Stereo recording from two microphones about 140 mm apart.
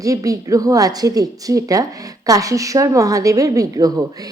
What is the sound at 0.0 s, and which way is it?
A woman's voice, 25° right (ahead or behind).